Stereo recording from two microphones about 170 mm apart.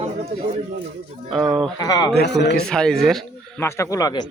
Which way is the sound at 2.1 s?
85° left.